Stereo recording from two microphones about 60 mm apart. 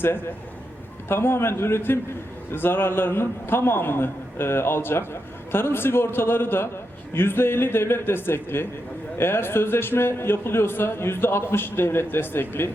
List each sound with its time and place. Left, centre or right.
1.0 s a man's voice: left